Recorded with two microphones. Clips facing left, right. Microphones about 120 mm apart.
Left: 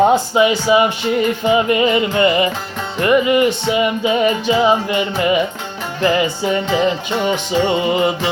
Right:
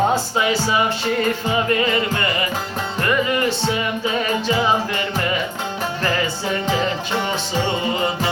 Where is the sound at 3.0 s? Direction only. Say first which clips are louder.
Left 7 dB; 15° left (ahead or behind).